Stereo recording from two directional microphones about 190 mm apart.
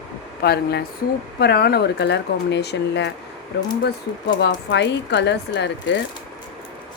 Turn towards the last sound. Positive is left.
turn(degrees=65)  # may be behind; listen again after turning